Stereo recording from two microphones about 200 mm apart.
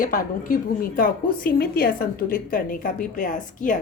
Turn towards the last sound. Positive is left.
turn(degrees=40)  # may be behind; listen again after turning